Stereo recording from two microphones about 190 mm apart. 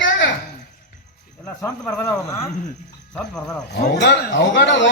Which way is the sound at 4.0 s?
70° left (ahead or behind).